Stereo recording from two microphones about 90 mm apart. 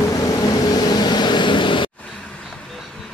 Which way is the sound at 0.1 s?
45° left (ahead or behind).